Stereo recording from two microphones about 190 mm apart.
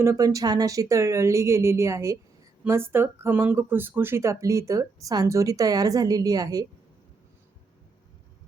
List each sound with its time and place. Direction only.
0.0 s speech: 15° right (ahead or behind)